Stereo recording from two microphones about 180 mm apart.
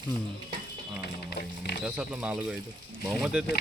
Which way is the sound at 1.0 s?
65° left (ahead or behind).